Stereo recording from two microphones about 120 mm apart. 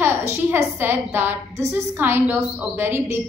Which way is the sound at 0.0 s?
20° right (ahead or behind).